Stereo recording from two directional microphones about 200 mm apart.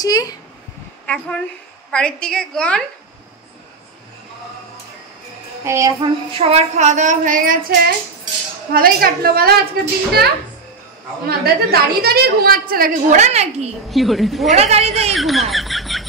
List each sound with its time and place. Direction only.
0.0 s speech: 20° left (ahead or behind)
1.0 s a woman's voice: 5° left (ahead or behind)
5.6 s child singing: 15° right (ahead or behind)
6.3 s a woman's voice: 30° right (ahead or behind); by 9.6 s 50° right (ahead or behind)
11.2 s a woman's voice: 50° right (ahead or behind); by 13.7 s 35° right (ahead or behind)
13.8 s a woman's voice: centre (ahead or behind)
14.5 s a woman's voice: 30° right (ahead or behind)
14.9 s a sound: centre (ahead or behind)